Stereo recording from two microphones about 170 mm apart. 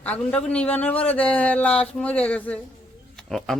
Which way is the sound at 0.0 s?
5° left (ahead or behind).